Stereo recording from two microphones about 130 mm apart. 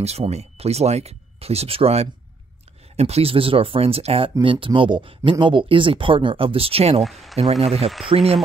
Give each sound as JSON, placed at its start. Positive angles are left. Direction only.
{"t": 0.0, "sound": "speech", "side_deg": -55}
{"t": 7.0, "sound": "speech", "side_deg": 0}
{"t": 7.6, "sound": "speech", "side_deg": -50}